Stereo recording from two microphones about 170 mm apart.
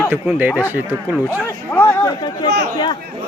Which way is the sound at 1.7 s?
10° left (ahead or behind).